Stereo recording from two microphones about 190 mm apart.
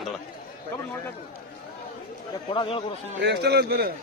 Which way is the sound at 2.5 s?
25° left (ahead or behind).